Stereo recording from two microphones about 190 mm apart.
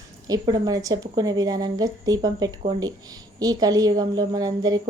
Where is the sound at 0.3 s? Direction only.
20° right (ahead or behind).